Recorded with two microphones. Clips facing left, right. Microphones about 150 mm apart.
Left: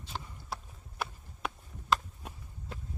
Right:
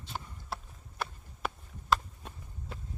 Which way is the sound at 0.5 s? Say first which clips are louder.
Right 1 dB; centre (ahead or behind).